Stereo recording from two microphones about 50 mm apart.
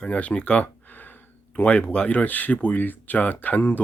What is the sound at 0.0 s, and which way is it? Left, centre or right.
Speech, left.